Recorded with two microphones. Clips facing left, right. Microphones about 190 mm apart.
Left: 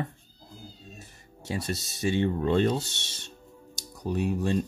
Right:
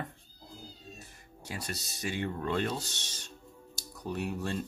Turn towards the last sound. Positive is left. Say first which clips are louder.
# left 7 dB
turn(degrees=15)  # may be behind; listen again after turning